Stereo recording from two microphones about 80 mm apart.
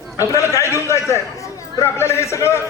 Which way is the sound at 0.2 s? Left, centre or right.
Left.